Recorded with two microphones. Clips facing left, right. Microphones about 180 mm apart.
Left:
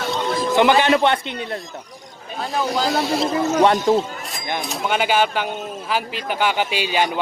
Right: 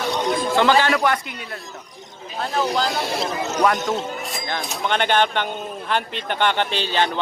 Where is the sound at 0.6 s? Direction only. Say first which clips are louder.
Left 3 dB; 20° left (ahead or behind).